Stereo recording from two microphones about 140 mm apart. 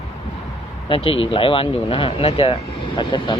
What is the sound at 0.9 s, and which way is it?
Speech, 40° left (ahead or behind).